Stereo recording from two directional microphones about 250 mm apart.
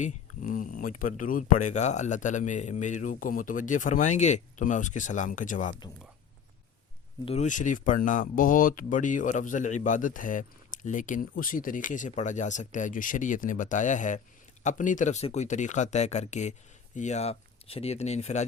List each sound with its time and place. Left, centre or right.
0.0 s speech: left
7.3 s speech: left